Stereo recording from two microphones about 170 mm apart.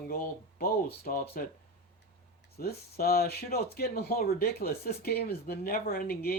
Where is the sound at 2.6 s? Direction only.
65° left (ahead or behind).